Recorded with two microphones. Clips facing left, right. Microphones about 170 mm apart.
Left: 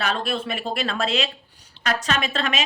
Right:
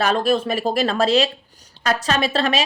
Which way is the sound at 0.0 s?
40° right (ahead or behind).